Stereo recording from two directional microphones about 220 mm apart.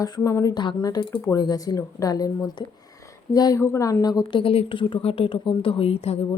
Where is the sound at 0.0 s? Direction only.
15° left (ahead or behind).